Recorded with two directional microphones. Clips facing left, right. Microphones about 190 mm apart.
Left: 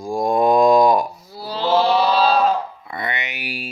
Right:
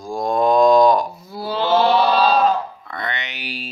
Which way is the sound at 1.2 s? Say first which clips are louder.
Right 1 dB; 55° right (ahead or behind).